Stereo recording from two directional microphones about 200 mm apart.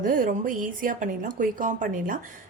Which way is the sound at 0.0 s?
45° right (ahead or behind).